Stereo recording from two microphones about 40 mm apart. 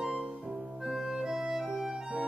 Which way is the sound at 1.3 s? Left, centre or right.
Centre.